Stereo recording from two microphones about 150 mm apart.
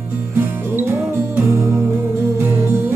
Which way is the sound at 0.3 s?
15° right (ahead or behind).